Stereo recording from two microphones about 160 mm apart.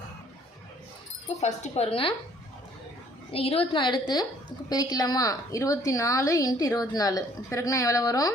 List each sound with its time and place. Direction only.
1.4 s a woman's voice: 45° left (ahead or behind)
3.3 s a woman's voice: 35° left (ahead or behind); by 8.3 s 20° left (ahead or behind)